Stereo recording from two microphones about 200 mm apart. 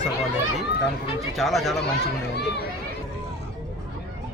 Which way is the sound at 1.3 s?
Centre (ahead or behind).